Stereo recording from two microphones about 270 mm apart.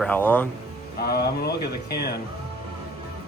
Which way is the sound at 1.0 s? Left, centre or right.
Left.